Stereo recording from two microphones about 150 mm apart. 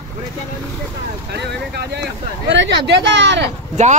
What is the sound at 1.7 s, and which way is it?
Speech, 90° right.